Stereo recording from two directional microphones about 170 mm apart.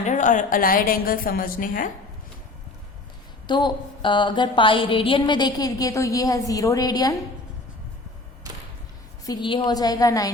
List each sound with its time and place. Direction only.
0.0 s a woman's voice: 45° left (ahead or behind)
3.4 s a woman's voice: 25° left (ahead or behind)
9.2 s a woman's voice: 25° left (ahead or behind)